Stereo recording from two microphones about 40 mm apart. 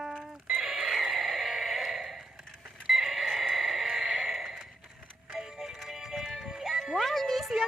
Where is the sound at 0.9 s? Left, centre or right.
Centre.